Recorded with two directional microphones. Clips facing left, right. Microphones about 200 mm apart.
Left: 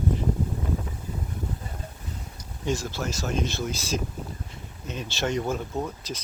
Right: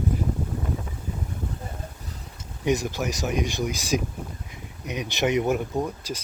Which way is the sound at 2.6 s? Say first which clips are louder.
Right 4 dB; 20° right (ahead or behind).